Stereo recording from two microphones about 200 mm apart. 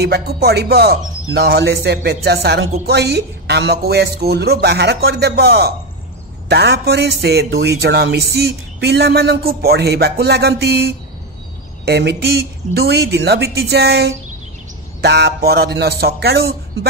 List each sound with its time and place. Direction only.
0.0 s speech: 55° right (ahead or behind)